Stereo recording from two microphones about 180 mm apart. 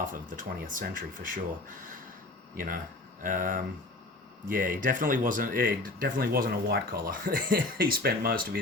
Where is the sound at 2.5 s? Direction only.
50° right (ahead or behind).